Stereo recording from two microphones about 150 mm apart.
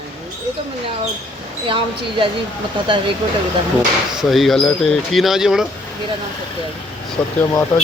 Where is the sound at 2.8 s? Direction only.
35° right (ahead or behind).